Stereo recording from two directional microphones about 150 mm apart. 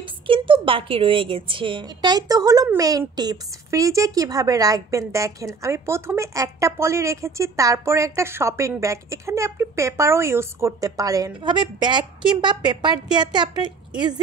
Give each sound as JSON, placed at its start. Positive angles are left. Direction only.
{"t": 0.0, "sound": "a woman's voice", "side_deg": -35}